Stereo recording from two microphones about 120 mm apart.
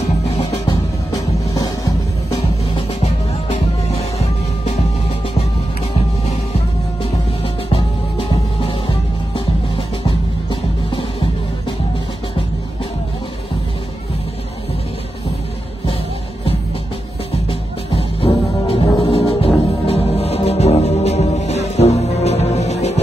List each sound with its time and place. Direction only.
1.1 s music: 30° left (ahead or behind)
3.0 s music: 55° left (ahead or behind)
6.2 s music: 60° left (ahead or behind)
18.2 s music: 50° left (ahead or behind)